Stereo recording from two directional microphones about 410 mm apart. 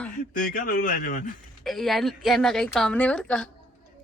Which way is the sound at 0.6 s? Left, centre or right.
Centre.